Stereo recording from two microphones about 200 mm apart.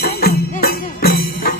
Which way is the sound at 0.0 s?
50° left (ahead or behind).